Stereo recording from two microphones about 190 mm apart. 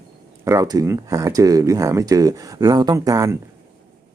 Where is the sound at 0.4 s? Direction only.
15° right (ahead or behind).